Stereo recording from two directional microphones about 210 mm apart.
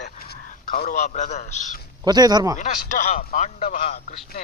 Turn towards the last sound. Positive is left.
turn(degrees=40)  # may be behind; listen again after turning